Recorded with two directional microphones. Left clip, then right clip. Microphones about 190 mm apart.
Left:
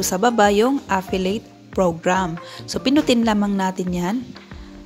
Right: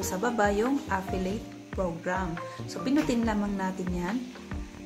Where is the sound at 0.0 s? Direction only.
45° left (ahead or behind).